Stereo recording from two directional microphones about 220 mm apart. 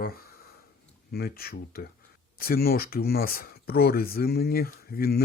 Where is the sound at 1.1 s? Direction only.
45° left (ahead or behind).